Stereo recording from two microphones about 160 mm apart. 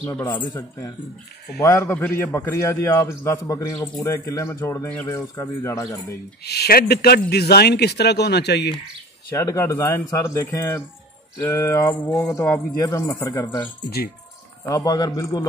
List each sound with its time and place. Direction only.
0.3 s a man's voice: 20° left (ahead or behind)
6.4 s speech: 90° left
9.3 s a man's voice: 20° left (ahead or behind)
13.8 s speech: 75° left (ahead or behind)
14.7 s speech: 20° left (ahead or behind)